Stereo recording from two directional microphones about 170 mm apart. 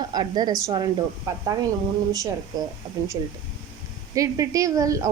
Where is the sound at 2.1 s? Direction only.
20° right (ahead or behind).